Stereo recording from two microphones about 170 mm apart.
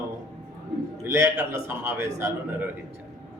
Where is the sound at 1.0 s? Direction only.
15° right (ahead or behind).